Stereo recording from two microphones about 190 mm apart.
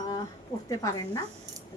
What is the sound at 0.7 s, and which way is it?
Speech, 15° left (ahead or behind).